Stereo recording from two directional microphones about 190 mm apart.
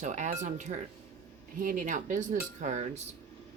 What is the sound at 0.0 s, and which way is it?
Speech, 40° right (ahead or behind).